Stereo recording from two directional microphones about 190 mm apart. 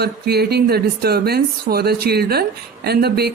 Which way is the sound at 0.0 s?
55° right (ahead or behind).